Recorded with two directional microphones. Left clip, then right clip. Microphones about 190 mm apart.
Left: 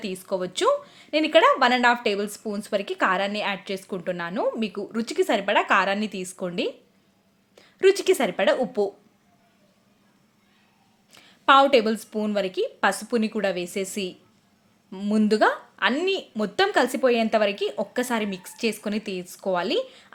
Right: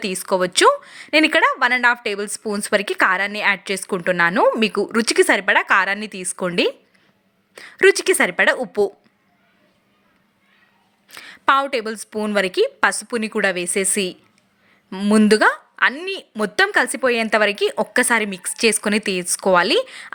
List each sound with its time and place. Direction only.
0.0 s speech: 20° right (ahead or behind)
11.1 s speech: 15° right (ahead or behind)